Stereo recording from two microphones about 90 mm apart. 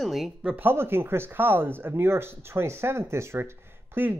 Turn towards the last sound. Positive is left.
turn(degrees=-25)  # may be behind; listen again after turning